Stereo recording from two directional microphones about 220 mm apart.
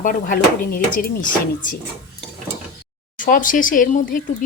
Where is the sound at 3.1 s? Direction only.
35° left (ahead or behind).